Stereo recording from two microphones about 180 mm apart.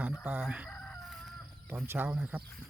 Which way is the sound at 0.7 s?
5° left (ahead or behind).